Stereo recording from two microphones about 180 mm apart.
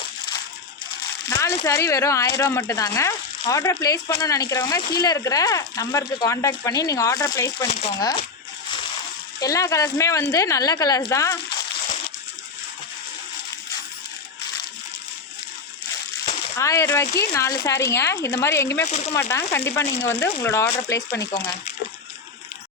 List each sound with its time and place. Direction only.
1.3 s speech: 20° left (ahead or behind)
7.7 s speech: 35° left (ahead or behind)
7.9 s speech: 20° left (ahead or behind)
9.4 s speech: 20° left (ahead or behind)
16.2 s speech: 15° left (ahead or behind)
18.9 s speech: 40° left (ahead or behind)
19.1 s speech: 15° left (ahead or behind)